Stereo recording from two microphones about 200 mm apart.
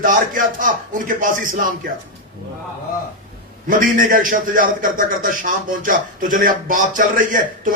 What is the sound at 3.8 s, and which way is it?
A man's voice, 45° right (ahead or behind).